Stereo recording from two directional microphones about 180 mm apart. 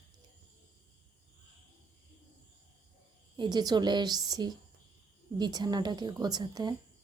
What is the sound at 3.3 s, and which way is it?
Speech, 25° right (ahead or behind).